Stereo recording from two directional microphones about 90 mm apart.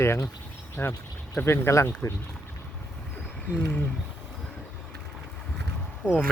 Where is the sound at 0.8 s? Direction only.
20° left (ahead or behind).